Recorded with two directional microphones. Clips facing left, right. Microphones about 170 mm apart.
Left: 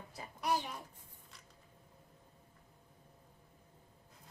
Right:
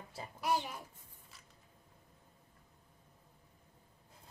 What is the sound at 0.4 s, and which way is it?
Speech, centre (ahead or behind).